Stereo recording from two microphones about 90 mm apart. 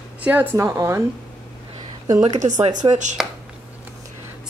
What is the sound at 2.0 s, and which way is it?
Speech, 40° right (ahead or behind).